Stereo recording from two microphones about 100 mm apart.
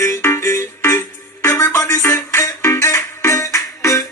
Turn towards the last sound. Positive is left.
turn(degrees=30)  # may be behind; listen again after turning